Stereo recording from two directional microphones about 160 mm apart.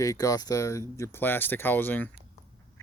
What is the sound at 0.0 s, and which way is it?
Speech, 20° left (ahead or behind).